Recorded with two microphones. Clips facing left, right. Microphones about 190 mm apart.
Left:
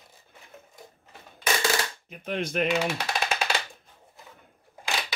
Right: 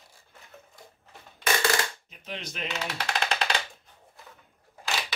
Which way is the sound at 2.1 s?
55° left (ahead or behind).